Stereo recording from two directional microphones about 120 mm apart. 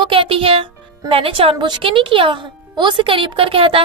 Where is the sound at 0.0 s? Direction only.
50° right (ahead or behind).